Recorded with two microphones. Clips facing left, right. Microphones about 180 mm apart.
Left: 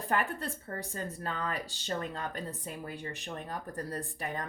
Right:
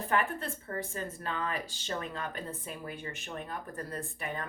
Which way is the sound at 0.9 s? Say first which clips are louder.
Even; 35° left (ahead or behind).